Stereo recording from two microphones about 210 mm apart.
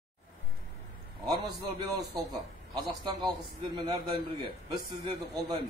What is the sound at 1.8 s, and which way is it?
A man's voice, 15° right (ahead or behind).